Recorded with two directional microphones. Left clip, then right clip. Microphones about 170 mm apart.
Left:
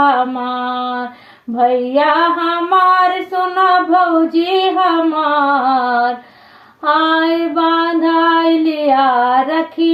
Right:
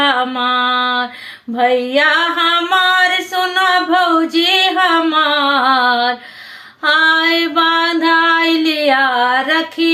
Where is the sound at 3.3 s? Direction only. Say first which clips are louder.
Left 4 dB; 20° right (ahead or behind).